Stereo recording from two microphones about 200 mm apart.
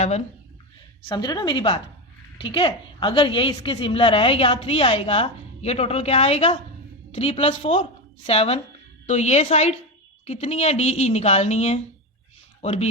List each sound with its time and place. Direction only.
1.0 s a woman's voice: 20° left (ahead or behind)